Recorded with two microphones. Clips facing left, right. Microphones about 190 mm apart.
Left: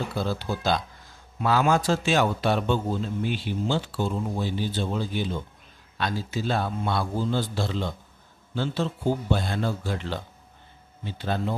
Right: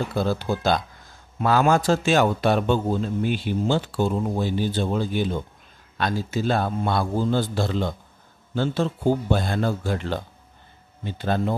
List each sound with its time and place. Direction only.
0.2 s a man's voice: 50° right (ahead or behind)